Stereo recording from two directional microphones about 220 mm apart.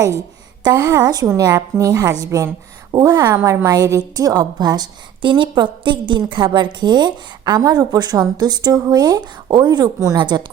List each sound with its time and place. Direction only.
0.6 s a woman's voice: 10° right (ahead or behind)